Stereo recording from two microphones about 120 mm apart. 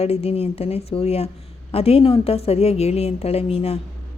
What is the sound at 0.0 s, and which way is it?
A woman's voice, 60° left (ahead or behind).